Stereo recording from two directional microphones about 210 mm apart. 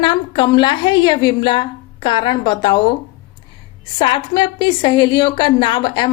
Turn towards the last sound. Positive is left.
turn(degrees=20)  # may be behind; listen again after turning